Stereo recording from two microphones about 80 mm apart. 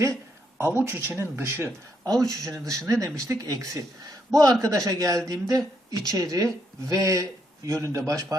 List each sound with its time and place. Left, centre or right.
0.6 s speech: right
2.2 s speech: right